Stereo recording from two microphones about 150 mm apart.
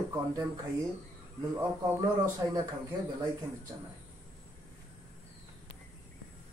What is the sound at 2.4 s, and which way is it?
Speech, 25° right (ahead or behind).